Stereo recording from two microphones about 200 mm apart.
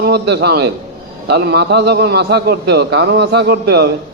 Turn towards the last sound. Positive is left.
turn(degrees=-55)  # may be behind; listen again after turning